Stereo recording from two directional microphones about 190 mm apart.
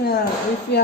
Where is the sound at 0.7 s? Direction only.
60° left (ahead or behind).